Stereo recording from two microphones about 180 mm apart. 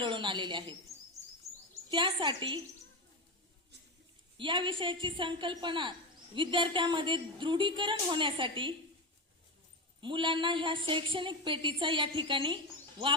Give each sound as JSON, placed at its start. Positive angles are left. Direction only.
{"t": 0.0, "sound": "a woman's voice", "side_deg": -25}
{"t": 1.9, "sound": "a woman's voice", "side_deg": -25}
{"t": 4.4, "sound": "a woman's voice", "side_deg": -25}
{"t": 10.0, "sound": "a woman's voice", "side_deg": -25}